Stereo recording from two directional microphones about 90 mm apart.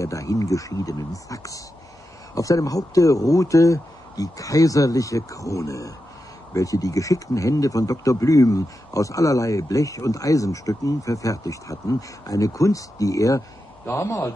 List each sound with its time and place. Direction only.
0.0 s speech: 40° left (ahead or behind)